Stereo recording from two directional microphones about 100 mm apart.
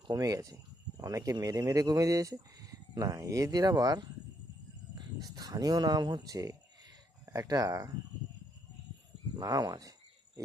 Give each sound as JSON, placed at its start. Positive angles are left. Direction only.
{"t": 0.1, "sound": "speech", "side_deg": -35}
{"t": 5.2, "sound": "speech", "side_deg": -40}
{"t": 9.3, "sound": "speech", "side_deg": -40}